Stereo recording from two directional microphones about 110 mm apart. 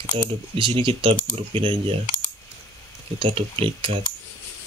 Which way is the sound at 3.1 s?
50° right (ahead or behind).